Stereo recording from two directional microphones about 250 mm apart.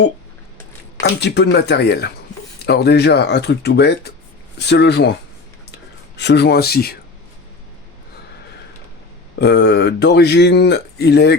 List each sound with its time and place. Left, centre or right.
1.0 s speech: left
6.1 s speech: left
9.4 s speech: left